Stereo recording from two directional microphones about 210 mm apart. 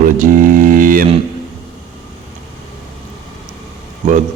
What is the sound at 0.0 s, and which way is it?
Mantra, 40° right (ahead or behind).